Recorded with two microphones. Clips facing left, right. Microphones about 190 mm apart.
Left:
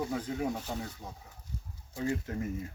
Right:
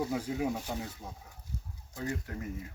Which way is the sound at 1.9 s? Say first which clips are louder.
Left 4 dB; 20° left (ahead or behind).